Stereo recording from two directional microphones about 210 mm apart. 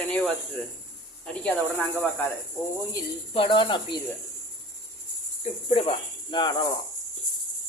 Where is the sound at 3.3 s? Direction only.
25° left (ahead or behind).